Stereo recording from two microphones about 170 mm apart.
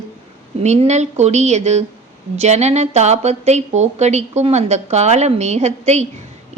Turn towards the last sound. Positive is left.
turn(degrees=-40)  # may be behind; listen again after turning